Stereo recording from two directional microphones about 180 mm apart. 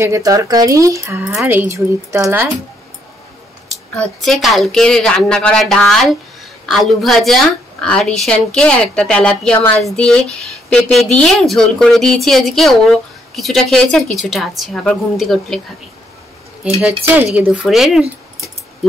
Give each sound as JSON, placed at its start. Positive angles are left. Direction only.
{"t": 0.0, "sound": "speech", "side_deg": -15}
{"t": 3.9, "sound": "speech", "side_deg": 0}
{"t": 16.6, "sound": "speech", "side_deg": -5}